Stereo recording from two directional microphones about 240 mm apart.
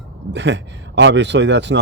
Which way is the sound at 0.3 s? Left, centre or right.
Right.